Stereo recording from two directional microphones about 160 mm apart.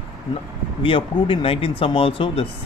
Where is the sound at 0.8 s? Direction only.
35° left (ahead or behind).